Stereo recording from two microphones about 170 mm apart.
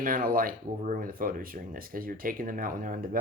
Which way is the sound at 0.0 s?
55° right (ahead or behind).